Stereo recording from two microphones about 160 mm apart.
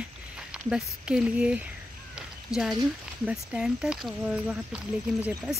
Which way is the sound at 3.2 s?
5° right (ahead or behind).